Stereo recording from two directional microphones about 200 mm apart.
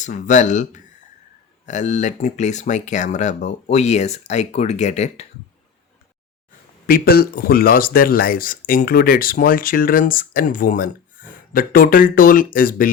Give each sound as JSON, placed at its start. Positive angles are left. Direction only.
{"t": 0.0, "sound": "speech", "side_deg": 40}
{"t": 6.8, "sound": "speech", "side_deg": 50}